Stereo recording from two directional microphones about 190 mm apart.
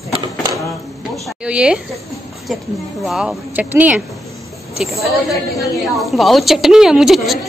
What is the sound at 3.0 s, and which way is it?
A woman's voice, 5° right (ahead or behind).